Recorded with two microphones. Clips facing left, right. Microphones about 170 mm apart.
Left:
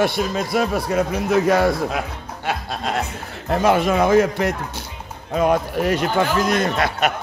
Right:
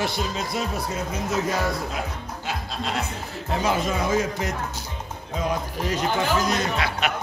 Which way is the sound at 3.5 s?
60° left (ahead or behind).